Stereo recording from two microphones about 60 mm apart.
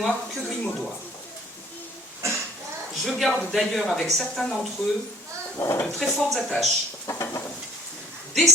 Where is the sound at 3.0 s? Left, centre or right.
Centre.